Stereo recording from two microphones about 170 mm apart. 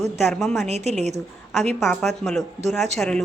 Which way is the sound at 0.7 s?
40° right (ahead or behind).